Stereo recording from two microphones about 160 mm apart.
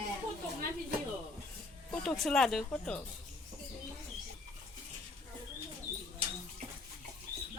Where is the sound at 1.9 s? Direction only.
Centre (ahead or behind).